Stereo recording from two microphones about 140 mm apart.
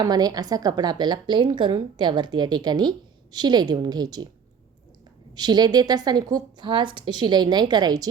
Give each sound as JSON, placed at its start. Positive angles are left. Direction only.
{"t": 0.0, "sound": "a woman's voice", "side_deg": -30}
{"t": 5.3, "sound": "a woman's voice", "side_deg": -30}